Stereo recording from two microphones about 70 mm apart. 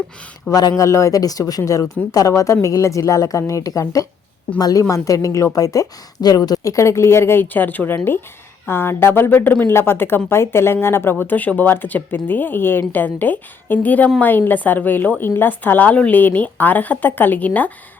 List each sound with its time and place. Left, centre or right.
0.5 s speech: left
4.5 s speech: left
5.0 s speech: left
6.6 s speech: left
7.4 s speech: left